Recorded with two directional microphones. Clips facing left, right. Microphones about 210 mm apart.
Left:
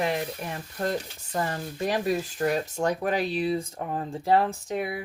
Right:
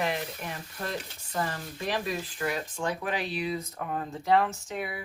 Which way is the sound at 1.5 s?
45° left (ahead or behind).